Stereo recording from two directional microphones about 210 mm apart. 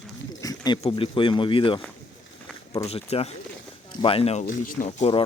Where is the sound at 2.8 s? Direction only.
30° left (ahead or behind).